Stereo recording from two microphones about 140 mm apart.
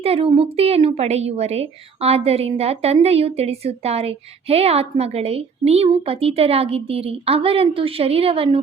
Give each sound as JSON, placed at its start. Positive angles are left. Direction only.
{"t": 0.0, "sound": "a woman's voice", "side_deg": -45}